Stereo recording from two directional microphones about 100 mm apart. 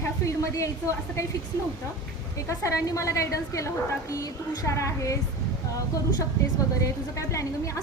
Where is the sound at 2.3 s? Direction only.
30° left (ahead or behind).